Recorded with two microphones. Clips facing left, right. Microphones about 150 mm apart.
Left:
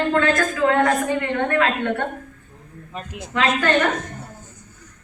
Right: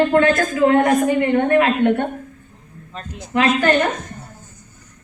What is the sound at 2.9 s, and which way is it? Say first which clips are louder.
Speech: even; 10° left (ahead or behind).